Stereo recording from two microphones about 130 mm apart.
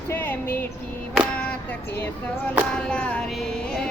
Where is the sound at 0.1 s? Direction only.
15° left (ahead or behind).